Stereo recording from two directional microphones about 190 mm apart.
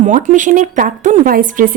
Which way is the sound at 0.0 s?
40° right (ahead or behind).